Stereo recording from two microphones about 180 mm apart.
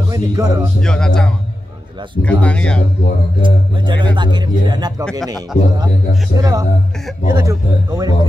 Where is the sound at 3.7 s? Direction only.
25° right (ahead or behind).